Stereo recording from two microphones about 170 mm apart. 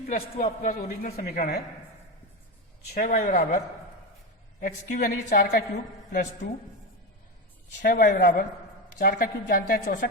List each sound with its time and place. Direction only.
0.1 s a man's voice: 45° left (ahead or behind)
0.8 s a woman's voice: 60° left (ahead or behind)
2.9 s a man's voice: 50° left (ahead or behind)
4.6 s a woman's voice: 50° left (ahead or behind)
7.9 s a woman's voice: 55° left (ahead or behind)